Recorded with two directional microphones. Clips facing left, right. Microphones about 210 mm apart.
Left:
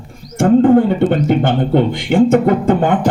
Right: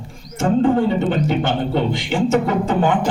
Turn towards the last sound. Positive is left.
turn(degrees=55)  # may be behind; listen again after turning